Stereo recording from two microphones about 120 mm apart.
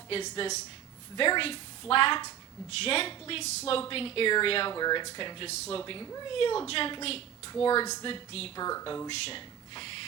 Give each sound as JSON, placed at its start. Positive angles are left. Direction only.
{"t": 1.1, "sound": "a woman's voice", "side_deg": 45}
{"t": 4.7, "sound": "speech", "side_deg": 35}
{"t": 5.5, "sound": "speech", "side_deg": 65}
{"t": 5.8, "sound": "speech", "side_deg": 35}
{"t": 6.3, "sound": "a woman's voice", "side_deg": 45}
{"t": 8.3, "sound": "speech", "side_deg": 55}
{"t": 8.5, "sound": "speech", "side_deg": 30}
{"t": 9.0, "sound": "speech", "side_deg": 50}